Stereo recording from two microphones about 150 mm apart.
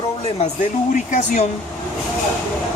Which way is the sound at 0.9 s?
55° left (ahead or behind).